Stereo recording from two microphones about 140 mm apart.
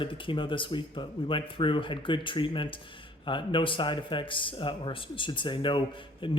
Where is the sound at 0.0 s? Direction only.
35° left (ahead or behind).